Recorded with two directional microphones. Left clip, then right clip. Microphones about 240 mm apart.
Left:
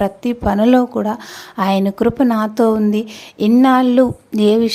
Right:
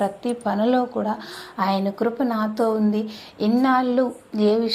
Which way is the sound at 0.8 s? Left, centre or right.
Left.